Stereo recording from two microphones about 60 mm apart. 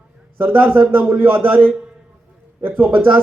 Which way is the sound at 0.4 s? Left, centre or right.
Right.